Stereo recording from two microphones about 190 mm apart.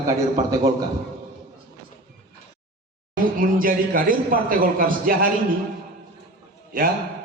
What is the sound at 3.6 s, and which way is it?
A man's voice, 45° right (ahead or behind).